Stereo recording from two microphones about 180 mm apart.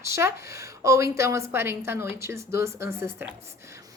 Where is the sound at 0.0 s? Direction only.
15° right (ahead or behind).